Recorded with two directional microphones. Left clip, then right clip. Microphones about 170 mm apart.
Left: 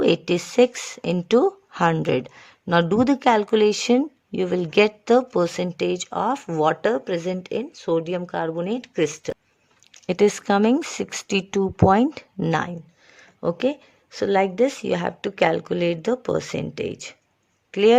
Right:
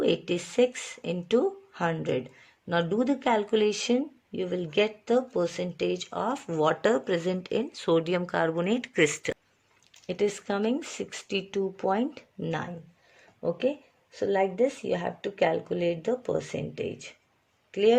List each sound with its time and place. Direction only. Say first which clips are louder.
0.0 s speech: left 7 dB; 35° left (ahead or behind); by 9.3 s 15° left (ahead or behind)
9.9 s speech: left 9 dB; 35° left (ahead or behind)
17.7 s a sound: left 6 dB; 40° left (ahead or behind)